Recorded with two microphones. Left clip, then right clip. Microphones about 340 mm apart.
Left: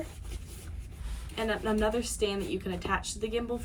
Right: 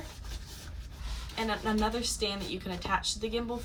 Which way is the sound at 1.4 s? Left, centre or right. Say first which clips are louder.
Left 1 dB; centre.